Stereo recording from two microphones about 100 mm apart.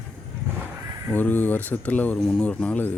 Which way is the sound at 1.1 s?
20° left (ahead or behind).